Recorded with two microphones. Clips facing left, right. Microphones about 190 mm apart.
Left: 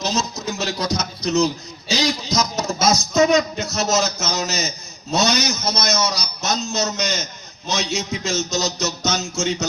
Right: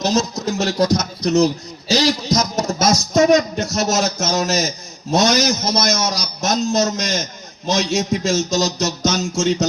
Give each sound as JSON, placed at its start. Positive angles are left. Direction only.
{"t": 0.0, "sound": "a man's voice", "side_deg": -50}